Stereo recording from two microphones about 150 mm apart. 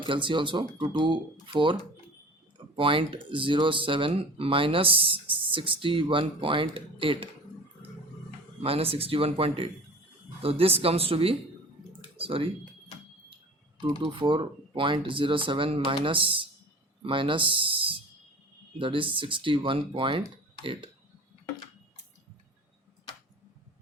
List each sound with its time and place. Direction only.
0.1 s speech: 35° right (ahead or behind)
2.7 s speech: 35° right (ahead or behind)
8.6 s speech: 40° right (ahead or behind)
14.0 s speech: 35° right (ahead or behind)